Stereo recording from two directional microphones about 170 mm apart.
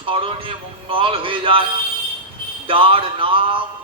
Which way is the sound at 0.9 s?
30° right (ahead or behind).